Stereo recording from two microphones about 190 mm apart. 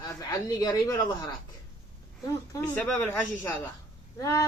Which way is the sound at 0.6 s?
20° left (ahead or behind).